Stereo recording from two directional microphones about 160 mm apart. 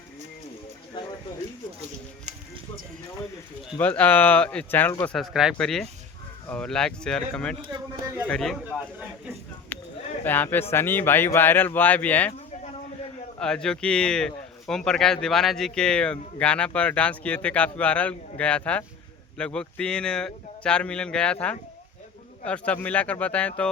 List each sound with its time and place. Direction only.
2.3 s music: 45° right (ahead or behind)
3.8 s speech: 10° left (ahead or behind)
5.1 s speech: centre (ahead or behind)
7.7 s speech: 20° right (ahead or behind)
8.3 s speech: centre (ahead or behind)
9.7 s a sound: 10° left (ahead or behind)
10.2 s speech: 10° left (ahead or behind)
13.4 s speech: 5° left (ahead or behind)